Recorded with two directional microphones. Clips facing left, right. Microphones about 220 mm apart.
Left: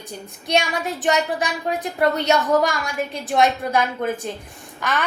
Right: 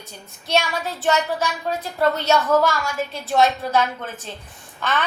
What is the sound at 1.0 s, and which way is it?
A woman's voice, 15° left (ahead or behind).